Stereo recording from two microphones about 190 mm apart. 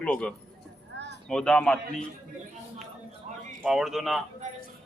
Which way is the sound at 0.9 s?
65° right (ahead or behind).